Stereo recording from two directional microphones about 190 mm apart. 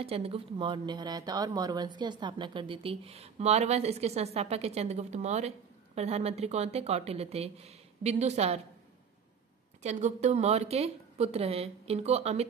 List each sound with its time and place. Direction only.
0.0 s speech: 30° right (ahead or behind)
9.8 s speech: 35° right (ahead or behind)